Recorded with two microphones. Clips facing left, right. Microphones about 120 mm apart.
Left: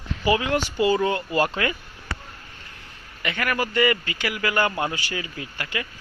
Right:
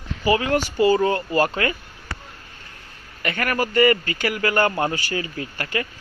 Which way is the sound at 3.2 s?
45° right (ahead or behind).